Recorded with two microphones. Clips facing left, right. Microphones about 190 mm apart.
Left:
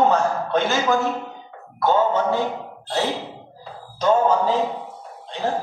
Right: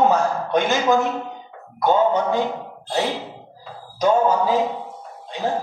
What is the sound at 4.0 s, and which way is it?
Speech, 10° right (ahead or behind).